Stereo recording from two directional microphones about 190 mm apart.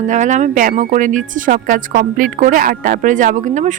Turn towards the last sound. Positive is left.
turn(degrees=-40)  # may be behind; listen again after turning